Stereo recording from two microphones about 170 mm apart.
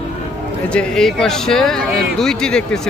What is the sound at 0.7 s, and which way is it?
Speech, 5° left (ahead or behind).